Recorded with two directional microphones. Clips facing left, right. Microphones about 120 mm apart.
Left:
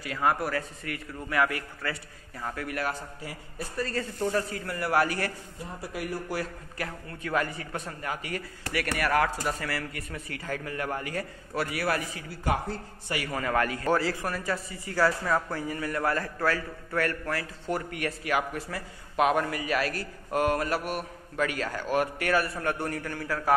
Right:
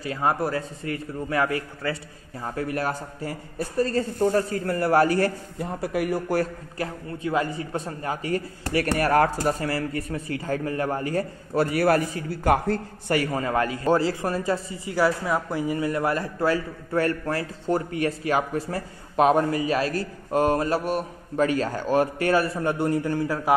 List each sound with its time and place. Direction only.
0.0 s a man's voice: 30° right (ahead or behind)
5.6 s speech: 60° right (ahead or behind)
6.8 s a man's voice: 25° right (ahead or behind); by 12.5 s 40° right (ahead or behind)
13.3 s a man's voice: 25° right (ahead or behind)